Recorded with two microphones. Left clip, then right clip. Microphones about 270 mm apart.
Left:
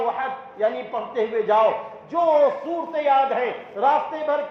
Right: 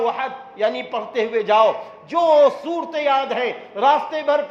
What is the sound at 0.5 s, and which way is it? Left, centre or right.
A man's voice, right.